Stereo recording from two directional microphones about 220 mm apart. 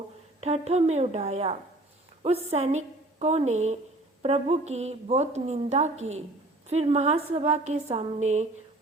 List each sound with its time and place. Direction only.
0.4 s a woman's voice: 30° right (ahead or behind)